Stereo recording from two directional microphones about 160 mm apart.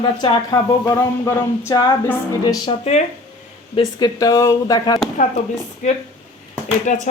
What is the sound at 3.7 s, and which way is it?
Speech, 25° left (ahead or behind).